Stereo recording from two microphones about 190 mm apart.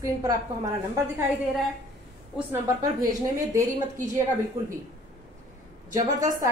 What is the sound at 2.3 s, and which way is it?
A woman's voice, 15° right (ahead or behind).